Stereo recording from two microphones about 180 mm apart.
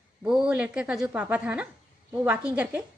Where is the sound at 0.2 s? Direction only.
5° right (ahead or behind).